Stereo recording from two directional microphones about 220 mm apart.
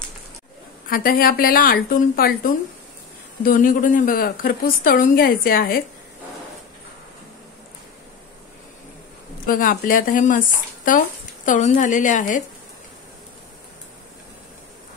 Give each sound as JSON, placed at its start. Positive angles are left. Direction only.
{"t": 0.8, "sound": "a woman's voice", "side_deg": 40}
{"t": 9.5, "sound": "a woman's voice", "side_deg": 40}